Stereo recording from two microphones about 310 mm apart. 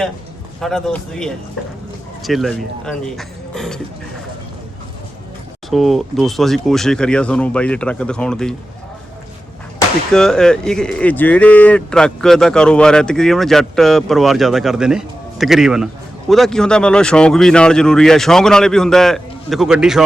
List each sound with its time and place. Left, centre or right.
0.6 s speech: centre
5.7 s speech: centre
9.7 s speech: centre